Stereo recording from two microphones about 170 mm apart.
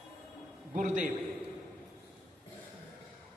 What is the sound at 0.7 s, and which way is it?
Speech, 50° right (ahead or behind).